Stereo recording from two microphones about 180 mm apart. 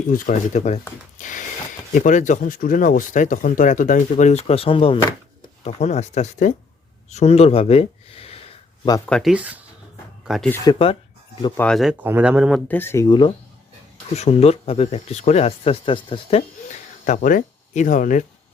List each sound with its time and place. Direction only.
0.1 s speech: 45° left (ahead or behind)
1.2 s a sound: 45° left (ahead or behind)
1.9 s speech: 45° left (ahead or behind)
9.0 s speech: 5° left (ahead or behind)
9.3 s speech: 10° right (ahead or behind)
10.7 s speech: 30° left (ahead or behind)
11.5 s speech: 5° left (ahead or behind); by 13.3 s 25° left (ahead or behind)
14.1 s speech: 35° left (ahead or behind)